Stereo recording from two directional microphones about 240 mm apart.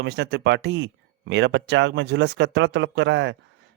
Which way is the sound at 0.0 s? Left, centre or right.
Right.